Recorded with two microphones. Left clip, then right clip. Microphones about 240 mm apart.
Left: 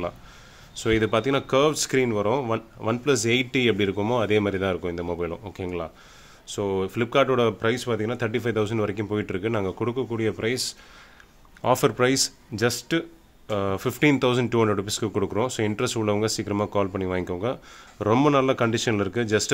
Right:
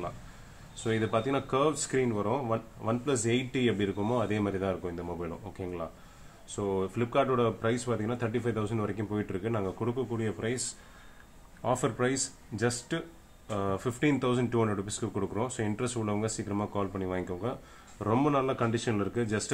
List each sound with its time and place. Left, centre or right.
0.7 s speech: left